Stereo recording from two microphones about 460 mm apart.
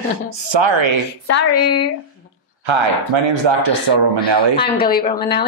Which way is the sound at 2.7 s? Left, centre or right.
Right.